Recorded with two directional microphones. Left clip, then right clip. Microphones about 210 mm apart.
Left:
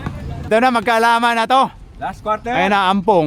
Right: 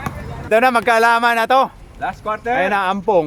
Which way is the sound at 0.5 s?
20° left (ahead or behind).